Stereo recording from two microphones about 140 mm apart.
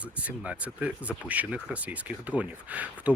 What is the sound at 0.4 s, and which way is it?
Speech, 10° right (ahead or behind).